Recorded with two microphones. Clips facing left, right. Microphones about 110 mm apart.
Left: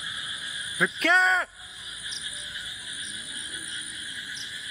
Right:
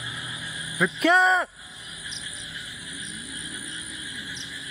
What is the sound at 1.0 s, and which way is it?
Speech, 5° right (ahead or behind).